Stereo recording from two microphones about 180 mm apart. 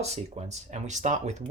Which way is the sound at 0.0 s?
35° right (ahead or behind).